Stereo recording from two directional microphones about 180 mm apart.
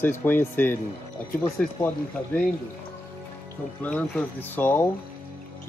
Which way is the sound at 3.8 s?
10° left (ahead or behind).